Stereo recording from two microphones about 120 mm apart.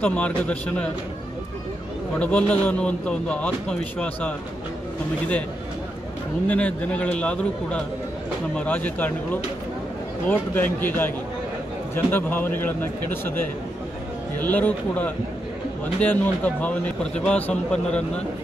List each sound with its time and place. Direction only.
0.0 s speech: 10° left (ahead or behind)
2.1 s speech: 10° left (ahead or behind)
6.4 s speech: 10° left (ahead or behind)